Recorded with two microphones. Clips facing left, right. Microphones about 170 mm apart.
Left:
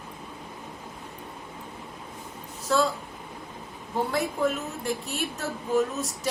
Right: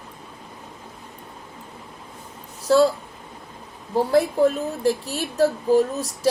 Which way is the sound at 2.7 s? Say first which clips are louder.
Right 8 dB; 35° right (ahead or behind).